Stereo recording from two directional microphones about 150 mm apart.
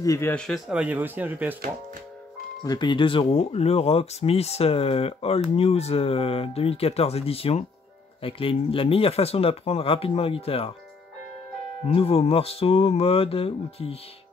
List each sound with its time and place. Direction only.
0.0 s speech: 20° left (ahead or behind)
0.3 s speech: 5° left (ahead or behind)
0.7 s speech: 10° right (ahead or behind)
2.6 s speech: 30° left (ahead or behind)
11.9 s speech: 40° left (ahead or behind)